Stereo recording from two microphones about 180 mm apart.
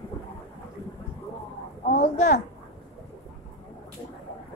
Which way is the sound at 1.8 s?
40° left (ahead or behind).